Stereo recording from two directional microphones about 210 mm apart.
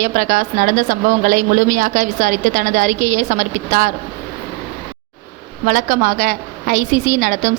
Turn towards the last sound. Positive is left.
turn(degrees=-40)  # may be behind; listen again after turning